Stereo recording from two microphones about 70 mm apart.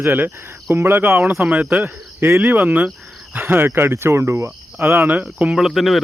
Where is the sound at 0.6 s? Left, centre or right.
Right.